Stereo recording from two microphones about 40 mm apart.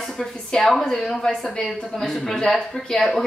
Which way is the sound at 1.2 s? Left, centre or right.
Centre.